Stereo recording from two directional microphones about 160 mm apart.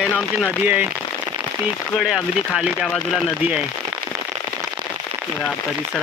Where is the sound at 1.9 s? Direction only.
Centre (ahead or behind).